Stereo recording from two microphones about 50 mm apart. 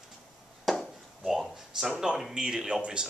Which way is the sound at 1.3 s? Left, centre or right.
Centre.